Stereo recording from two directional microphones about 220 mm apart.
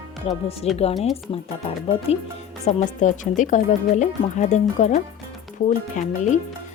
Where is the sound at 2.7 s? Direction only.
35° left (ahead or behind).